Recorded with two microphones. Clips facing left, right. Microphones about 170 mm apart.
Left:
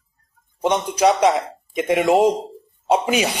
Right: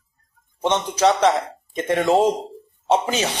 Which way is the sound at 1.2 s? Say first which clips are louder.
Left 1 dB; centre (ahead or behind).